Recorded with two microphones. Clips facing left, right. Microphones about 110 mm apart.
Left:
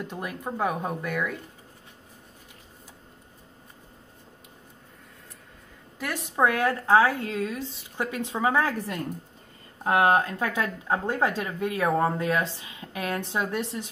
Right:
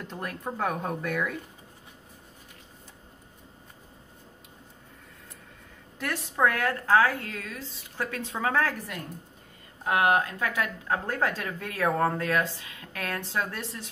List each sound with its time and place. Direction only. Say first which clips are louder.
0.0 s speech: left 2 dB; 10° left (ahead or behind)
5.9 s speech: left 2 dB; 15° left (ahead or behind)
9.8 s speech: left 3 dB; 30° left (ahead or behind)